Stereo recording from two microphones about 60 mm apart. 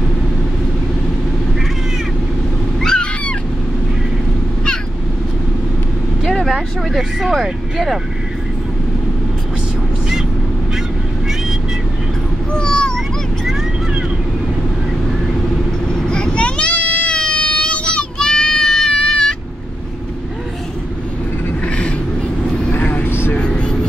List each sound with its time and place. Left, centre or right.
2.8 s goose: centre
6.2 s vehicle: centre
6.5 s speech: centre
12.5 s a sound: centre
15.9 s a sound: centre
21.6 s vehicle: centre; by 23.3 s left
23.3 s vehicle: centre